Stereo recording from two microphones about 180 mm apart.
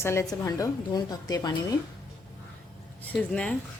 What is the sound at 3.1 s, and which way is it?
Speech, 5° left (ahead or behind).